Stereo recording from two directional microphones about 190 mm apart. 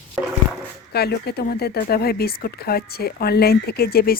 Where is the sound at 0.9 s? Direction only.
55° left (ahead or behind).